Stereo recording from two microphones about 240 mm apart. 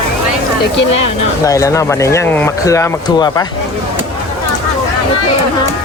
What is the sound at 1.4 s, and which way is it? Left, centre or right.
Speech, centre.